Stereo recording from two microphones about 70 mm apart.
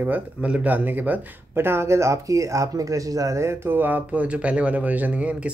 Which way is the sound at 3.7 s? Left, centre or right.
Right.